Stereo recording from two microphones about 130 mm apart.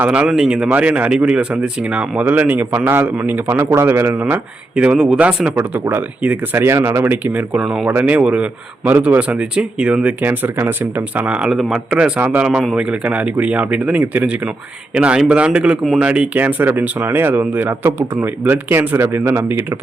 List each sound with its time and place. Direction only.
0.0 s speech: 10° right (ahead or behind)